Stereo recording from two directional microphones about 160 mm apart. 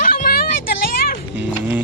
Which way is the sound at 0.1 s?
65° left (ahead or behind).